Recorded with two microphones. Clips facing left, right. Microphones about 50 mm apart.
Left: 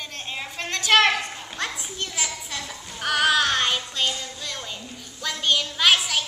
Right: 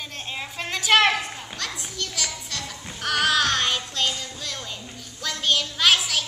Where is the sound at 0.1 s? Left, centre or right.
Centre.